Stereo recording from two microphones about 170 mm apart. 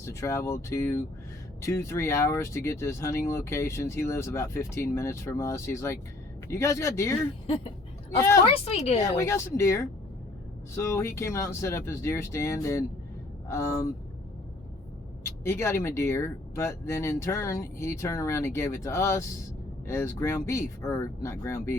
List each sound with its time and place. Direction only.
0.0 s speech: 15° left (ahead or behind)
7.4 s a sound: 30° left (ahead or behind)
8.2 s speech: 15° left (ahead or behind)
8.4 s a woman's voice: 35° left (ahead or behind)
9.0 s speech: 15° left (ahead or behind)
15.4 s speech: 15° left (ahead or behind)